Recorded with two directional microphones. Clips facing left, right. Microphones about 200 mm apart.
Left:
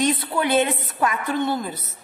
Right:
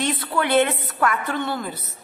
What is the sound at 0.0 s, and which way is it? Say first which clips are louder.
A woman's voice: left 2 dB; 20° left (ahead or behind).